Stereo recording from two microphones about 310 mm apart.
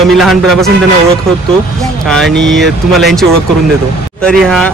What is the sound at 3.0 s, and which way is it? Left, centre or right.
A man's voice, centre.